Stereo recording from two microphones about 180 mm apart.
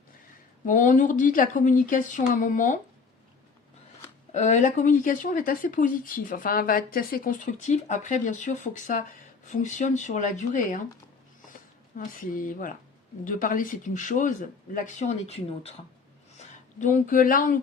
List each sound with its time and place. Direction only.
0.6 s speech: 45° left (ahead or behind)
4.4 s speech: 40° left (ahead or behind)
11.9 s speech: 50° left (ahead or behind)